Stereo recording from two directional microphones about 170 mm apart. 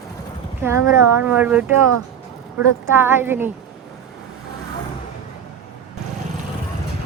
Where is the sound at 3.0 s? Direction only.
15° right (ahead or behind).